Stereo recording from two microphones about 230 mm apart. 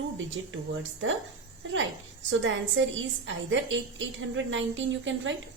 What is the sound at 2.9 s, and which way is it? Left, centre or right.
A woman's voice, right.